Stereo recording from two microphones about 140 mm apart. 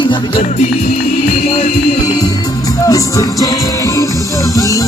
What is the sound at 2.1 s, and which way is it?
Music, 25° left (ahead or behind).